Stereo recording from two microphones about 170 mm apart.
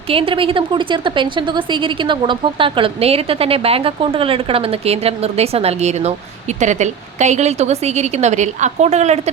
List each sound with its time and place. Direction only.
0.1 s a woman's voice: 30° right (ahead or behind)